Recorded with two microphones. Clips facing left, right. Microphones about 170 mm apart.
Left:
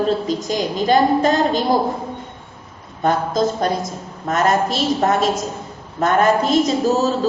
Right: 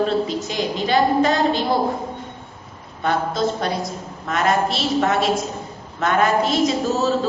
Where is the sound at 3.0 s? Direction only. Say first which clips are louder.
Left 3 dB; 45° left (ahead or behind).